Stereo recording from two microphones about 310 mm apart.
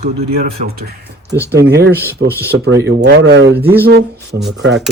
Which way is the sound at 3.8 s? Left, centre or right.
Right.